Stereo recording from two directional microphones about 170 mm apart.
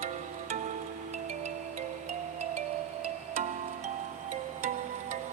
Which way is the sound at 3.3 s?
40° right (ahead or behind).